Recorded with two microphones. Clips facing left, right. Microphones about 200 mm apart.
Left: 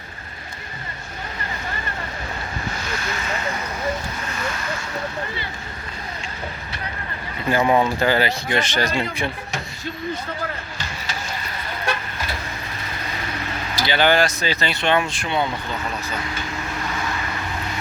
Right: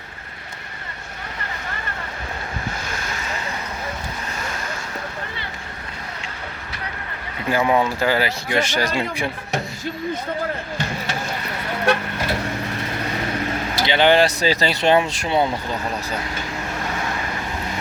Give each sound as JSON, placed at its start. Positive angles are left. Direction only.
{"t": 2.8, "sound": "vehicle", "side_deg": -45}
{"t": 7.5, "sound": "speech", "side_deg": 0}
{"t": 10.8, "sound": "vehicle", "side_deg": -60}
{"t": 13.8, "sound": "speech", "side_deg": -25}